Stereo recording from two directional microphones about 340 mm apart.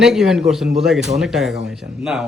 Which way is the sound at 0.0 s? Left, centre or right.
Centre.